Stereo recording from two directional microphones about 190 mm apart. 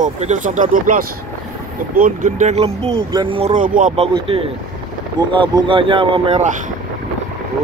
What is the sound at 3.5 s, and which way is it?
Speech, 45° right (ahead or behind).